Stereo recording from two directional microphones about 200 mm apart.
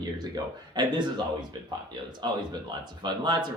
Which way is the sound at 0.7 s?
20° right (ahead or behind).